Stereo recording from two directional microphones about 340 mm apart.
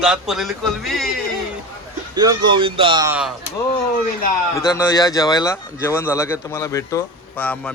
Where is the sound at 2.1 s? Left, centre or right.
Centre.